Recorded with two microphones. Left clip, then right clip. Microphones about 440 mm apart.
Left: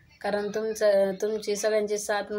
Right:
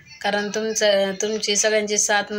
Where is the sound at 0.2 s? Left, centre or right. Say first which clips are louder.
Right 5 dB; left.